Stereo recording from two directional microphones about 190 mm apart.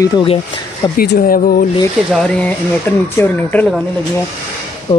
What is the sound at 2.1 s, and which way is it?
Speech, 5° left (ahead or behind).